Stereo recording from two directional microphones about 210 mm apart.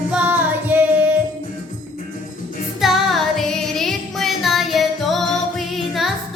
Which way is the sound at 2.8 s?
Centre (ahead or behind).